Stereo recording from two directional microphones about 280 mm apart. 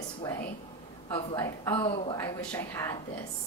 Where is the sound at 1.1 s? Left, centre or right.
Centre.